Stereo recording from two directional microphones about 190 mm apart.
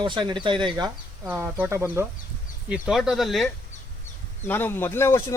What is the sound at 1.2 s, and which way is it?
Speech, 10° right (ahead or behind).